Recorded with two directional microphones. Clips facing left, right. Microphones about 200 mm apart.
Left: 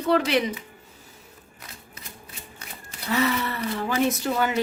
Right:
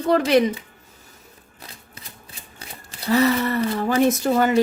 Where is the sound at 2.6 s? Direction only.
30° right (ahead or behind).